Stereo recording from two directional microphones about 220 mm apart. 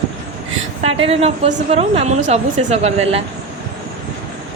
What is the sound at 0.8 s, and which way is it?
A woman's voice, 25° right (ahead or behind).